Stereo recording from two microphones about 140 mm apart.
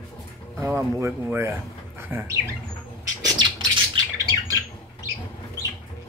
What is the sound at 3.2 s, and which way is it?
Bird, 35° right (ahead or behind).